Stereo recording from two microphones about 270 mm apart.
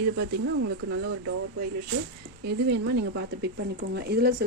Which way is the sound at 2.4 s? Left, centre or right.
Right.